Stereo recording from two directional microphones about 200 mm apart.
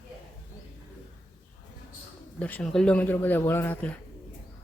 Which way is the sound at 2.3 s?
5° left (ahead or behind).